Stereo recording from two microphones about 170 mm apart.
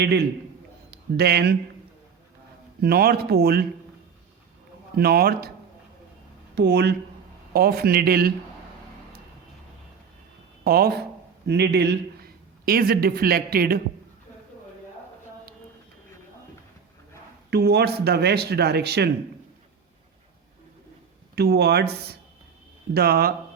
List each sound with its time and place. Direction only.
0.0 s speech: 80° right
0.9 s a man's voice: 65° right (ahead or behind)
2.8 s speech: 65° right (ahead or behind)
4.9 s speech: 65° right (ahead or behind)
6.6 s speech: 80° right
7.5 s speech: 65° right (ahead or behind)
10.6 s speech: 60° right (ahead or behind)
11.4 s a man's voice: 85° right; by 13.8 s 60° right (ahead or behind)
17.5 s speech: 70° right (ahead or behind)
21.3 s speech: 70° right (ahead or behind)
23.0 s speech: 65° right (ahead or behind)